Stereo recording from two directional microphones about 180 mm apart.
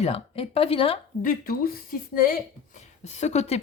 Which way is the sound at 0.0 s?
35° left (ahead or behind).